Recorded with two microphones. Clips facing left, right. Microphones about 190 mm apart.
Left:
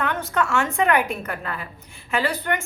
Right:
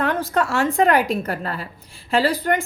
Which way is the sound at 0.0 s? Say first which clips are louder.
Right 3 dB; 35° right (ahead or behind).